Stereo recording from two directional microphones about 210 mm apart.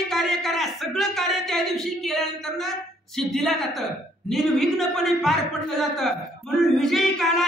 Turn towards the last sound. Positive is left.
turn(degrees=0)  # may be behind; listen again after turning